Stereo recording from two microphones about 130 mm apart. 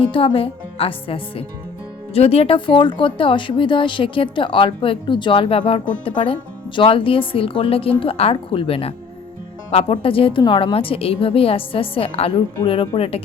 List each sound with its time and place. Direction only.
0.1 s speech: 45° left (ahead or behind)